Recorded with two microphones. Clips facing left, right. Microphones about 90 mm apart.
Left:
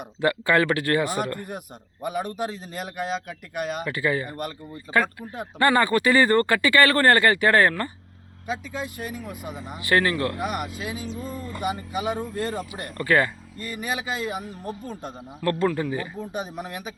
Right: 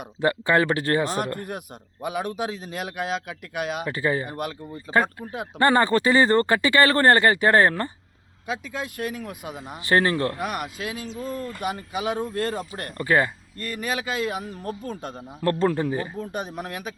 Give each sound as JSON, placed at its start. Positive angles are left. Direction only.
{"t": 0.2, "sound": "speech", "side_deg": -25}
{"t": 1.5, "sound": "speech", "side_deg": 0}
{"t": 3.8, "sound": "speech", "side_deg": -30}
{"t": 4.3, "sound": "speech", "side_deg": -5}
{"t": 5.5, "sound": "speech", "side_deg": -30}
{"t": 8.4, "sound": "speech", "side_deg": 0}
{"t": 9.8, "sound": "speech", "side_deg": -30}
{"t": 10.3, "sound": "speech", "side_deg": 0}
{"t": 13.0, "sound": "speech", "side_deg": -20}
{"t": 13.6, "sound": "speech", "side_deg": 5}
{"t": 15.4, "sound": "a man's voice", "side_deg": -30}
{"t": 16.3, "sound": "speech", "side_deg": 0}